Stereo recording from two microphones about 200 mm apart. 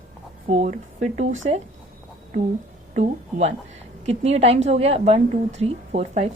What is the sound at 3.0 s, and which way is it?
A woman's voice, 35° right (ahead or behind).